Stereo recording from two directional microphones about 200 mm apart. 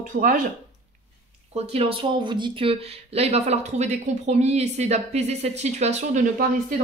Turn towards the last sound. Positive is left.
turn(degrees=-40)  # may be behind; listen again after turning